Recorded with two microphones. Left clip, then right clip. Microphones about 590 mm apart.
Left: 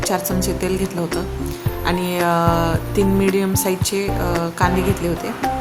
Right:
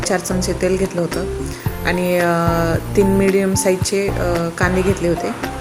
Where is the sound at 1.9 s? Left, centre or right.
Left.